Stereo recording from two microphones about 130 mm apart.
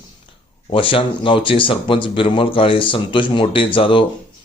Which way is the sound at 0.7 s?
40° left (ahead or behind).